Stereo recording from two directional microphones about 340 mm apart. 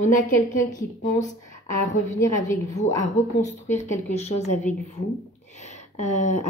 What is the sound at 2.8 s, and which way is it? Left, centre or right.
Speech, centre.